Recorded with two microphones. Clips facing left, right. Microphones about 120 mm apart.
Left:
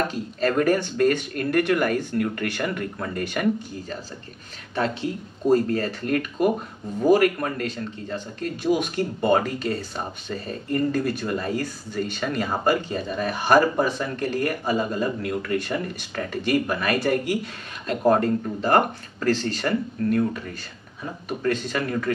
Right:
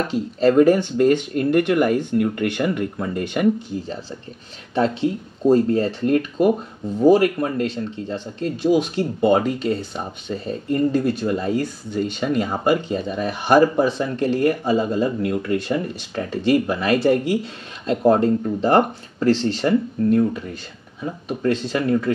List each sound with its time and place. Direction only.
0.1 s speech: 25° right (ahead or behind)